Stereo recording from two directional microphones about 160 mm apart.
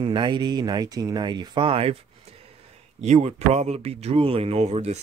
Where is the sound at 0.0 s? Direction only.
30° right (ahead or behind).